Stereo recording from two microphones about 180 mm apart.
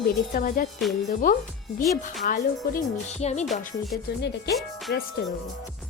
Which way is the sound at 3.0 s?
40° left (ahead or behind).